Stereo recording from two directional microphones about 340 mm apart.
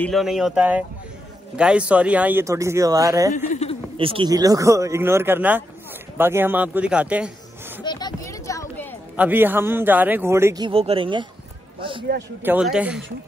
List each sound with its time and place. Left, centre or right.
0.0 s a man's voice: centre
3.3 s a sound: left
4.0 s a man's voice: centre
7.8 s a sound: centre
9.1 s a man's voice: centre
12.4 s speech: centre